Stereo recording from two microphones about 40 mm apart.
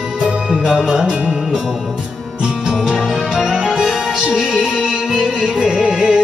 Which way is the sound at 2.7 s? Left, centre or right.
Centre.